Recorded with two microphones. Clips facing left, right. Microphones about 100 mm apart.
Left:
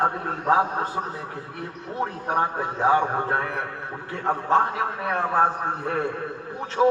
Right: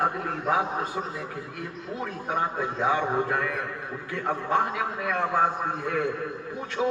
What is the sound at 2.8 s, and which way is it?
A man's voice, 40° left (ahead or behind).